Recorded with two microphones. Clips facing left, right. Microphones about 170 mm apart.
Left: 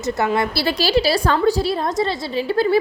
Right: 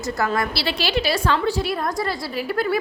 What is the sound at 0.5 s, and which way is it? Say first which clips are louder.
A woman's voice: left 5 dB; 45° left (ahead or behind).